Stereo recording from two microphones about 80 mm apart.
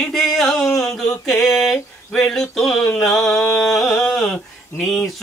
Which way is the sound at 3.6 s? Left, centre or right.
Centre.